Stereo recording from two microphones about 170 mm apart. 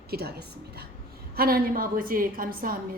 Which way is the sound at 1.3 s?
60° right (ahead or behind).